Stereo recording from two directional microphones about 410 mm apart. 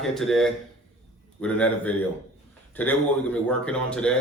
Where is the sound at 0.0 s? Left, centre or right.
Centre.